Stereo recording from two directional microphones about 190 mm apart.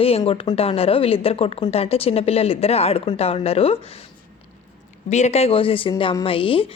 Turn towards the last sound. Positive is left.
turn(degrees=30)  # may be behind; listen again after turning